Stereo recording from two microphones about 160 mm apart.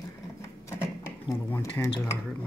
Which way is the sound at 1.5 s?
15° left (ahead or behind).